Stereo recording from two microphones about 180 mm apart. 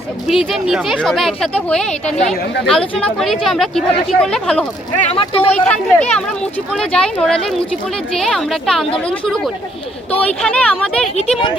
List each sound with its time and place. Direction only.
0.3 s speech: centre (ahead or behind)
4.9 s speech: 35° left (ahead or behind)
5.5 s speech: 5° left (ahead or behind)